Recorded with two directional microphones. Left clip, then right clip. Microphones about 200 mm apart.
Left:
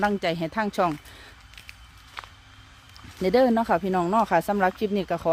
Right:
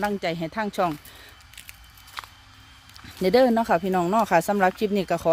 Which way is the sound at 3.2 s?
15° right (ahead or behind).